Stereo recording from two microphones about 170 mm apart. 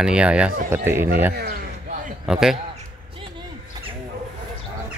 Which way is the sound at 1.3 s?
65° right (ahead or behind).